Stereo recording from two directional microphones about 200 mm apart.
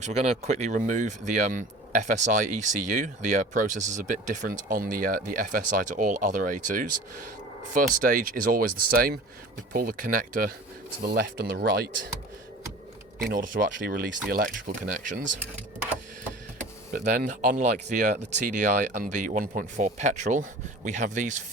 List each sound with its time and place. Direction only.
0.0 s speech: 35° right (ahead or behind)
13.3 s speech: 40° right (ahead or behind)
16.9 s speech: 40° right (ahead or behind)